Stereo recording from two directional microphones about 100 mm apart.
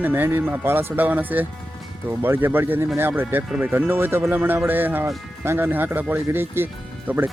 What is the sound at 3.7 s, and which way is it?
Speech, 20° right (ahead or behind).